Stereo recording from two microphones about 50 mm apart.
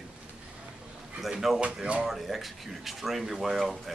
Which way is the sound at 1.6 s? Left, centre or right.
Right.